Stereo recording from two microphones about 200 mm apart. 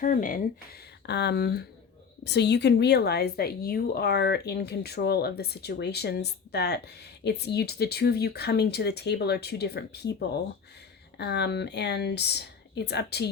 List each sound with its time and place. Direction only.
0.0 s speech: 40° left (ahead or behind)
1.0 s speech: 55° left (ahead or behind)